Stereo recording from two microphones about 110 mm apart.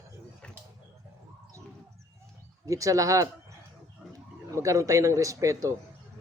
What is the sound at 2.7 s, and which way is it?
Speech, 30° right (ahead or behind).